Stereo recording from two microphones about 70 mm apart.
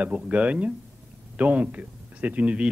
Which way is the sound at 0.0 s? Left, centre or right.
Right.